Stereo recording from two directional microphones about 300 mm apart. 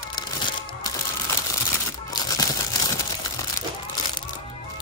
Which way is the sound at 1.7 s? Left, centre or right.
Centre.